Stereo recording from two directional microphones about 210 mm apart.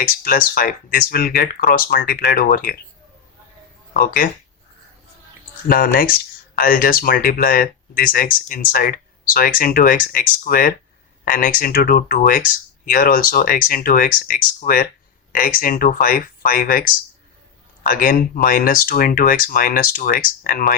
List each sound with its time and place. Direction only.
0.0 s speech: 40° left (ahead or behind)
3.9 s speech: 40° left (ahead or behind)
5.6 s speech: 45° left (ahead or behind)